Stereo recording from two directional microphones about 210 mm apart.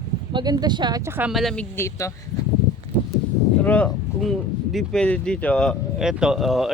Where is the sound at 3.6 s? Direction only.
5° left (ahead or behind).